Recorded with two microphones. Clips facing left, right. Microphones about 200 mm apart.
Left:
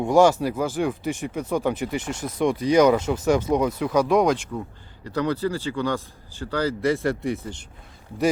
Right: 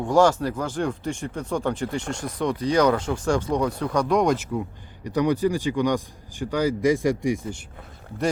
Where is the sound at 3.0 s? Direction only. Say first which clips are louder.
Left 3 dB; 20° left (ahead or behind).